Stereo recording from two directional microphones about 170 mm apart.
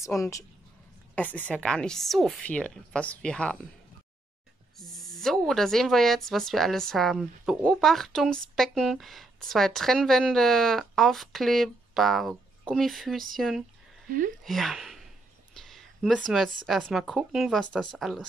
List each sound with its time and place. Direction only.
0.0 s a woman's voice: 20° left (ahead or behind)
4.7 s speech: centre (ahead or behind)